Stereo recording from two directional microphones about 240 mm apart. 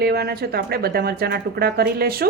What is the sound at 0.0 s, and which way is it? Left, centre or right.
Speech, right.